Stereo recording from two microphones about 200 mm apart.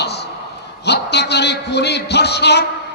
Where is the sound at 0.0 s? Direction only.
55° left (ahead or behind).